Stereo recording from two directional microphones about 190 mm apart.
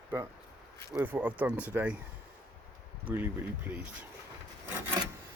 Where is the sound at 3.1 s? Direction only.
10° right (ahead or behind).